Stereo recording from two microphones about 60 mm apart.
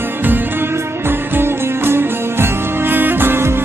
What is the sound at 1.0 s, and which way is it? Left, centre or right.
Music, right.